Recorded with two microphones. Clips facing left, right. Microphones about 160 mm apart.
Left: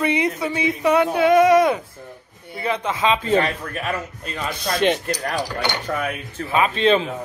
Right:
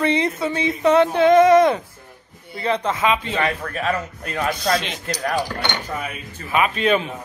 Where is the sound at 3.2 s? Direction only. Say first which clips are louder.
Left 4 dB; 40° left (ahead or behind).